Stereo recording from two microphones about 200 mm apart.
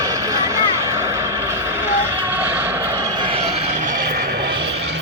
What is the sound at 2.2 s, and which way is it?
Vehicle, 10° right (ahead or behind).